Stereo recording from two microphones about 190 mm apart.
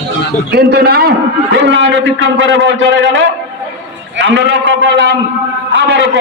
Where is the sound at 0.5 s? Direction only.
55° right (ahead or behind).